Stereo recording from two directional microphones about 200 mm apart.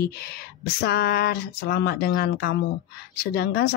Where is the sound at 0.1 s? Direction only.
50° left (ahead or behind).